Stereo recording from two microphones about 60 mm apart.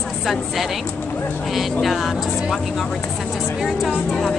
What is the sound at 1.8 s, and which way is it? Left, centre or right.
Speech, centre.